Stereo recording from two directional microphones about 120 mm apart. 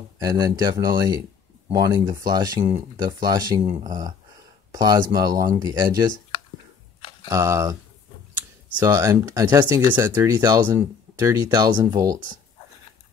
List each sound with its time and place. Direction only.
0.2 s speech: 30° right (ahead or behind)
4.7 s speech: 35° right (ahead or behind)
7.0 s a sound: 50° left (ahead or behind)
7.2 s speech: 25° right (ahead or behind)
8.7 s speech: 25° right (ahead or behind)